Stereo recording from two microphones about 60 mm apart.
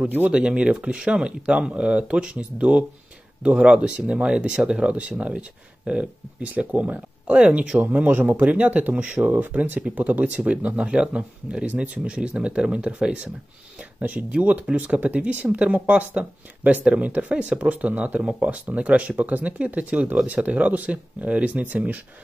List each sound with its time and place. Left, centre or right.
0.0 s speech: right
0.3 s speech: centre